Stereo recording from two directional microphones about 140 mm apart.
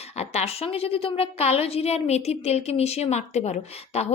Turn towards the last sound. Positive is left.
turn(degrees=50)  # may be behind; listen again after turning